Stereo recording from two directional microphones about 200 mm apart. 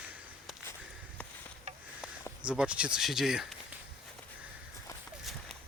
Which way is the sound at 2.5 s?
5° right (ahead or behind).